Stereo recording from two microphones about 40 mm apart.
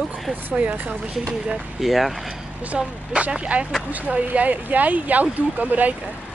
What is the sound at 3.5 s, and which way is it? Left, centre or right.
Speech, right.